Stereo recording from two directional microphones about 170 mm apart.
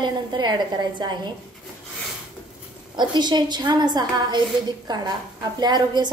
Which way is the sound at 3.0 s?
25° right (ahead or behind).